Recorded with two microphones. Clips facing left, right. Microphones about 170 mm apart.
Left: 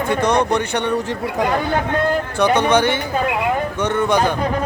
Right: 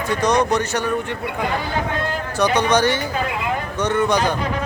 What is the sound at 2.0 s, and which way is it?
Speech, 55° left (ahead or behind).